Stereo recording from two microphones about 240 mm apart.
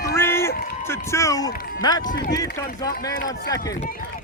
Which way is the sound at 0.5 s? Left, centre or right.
Left.